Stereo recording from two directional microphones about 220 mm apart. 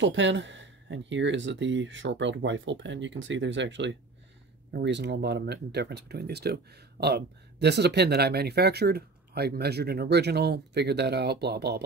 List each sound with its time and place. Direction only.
0.0 s speech: 55° right (ahead or behind)